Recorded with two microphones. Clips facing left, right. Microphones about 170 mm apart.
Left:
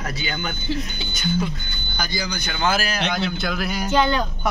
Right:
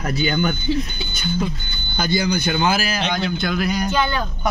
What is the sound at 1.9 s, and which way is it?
Speech, 25° right (ahead or behind).